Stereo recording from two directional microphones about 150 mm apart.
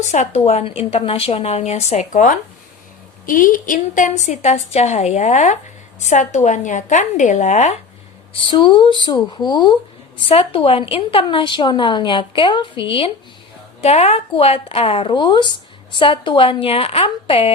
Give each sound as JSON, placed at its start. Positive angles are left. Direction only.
{"t": 0.0, "sound": "a woman's voice", "side_deg": 50}
{"t": 8.4, "sound": "a woman's voice", "side_deg": 30}